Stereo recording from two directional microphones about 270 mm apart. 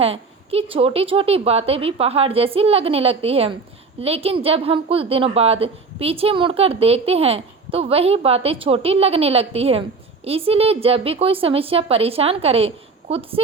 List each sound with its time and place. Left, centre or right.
0.0 s a woman's voice: right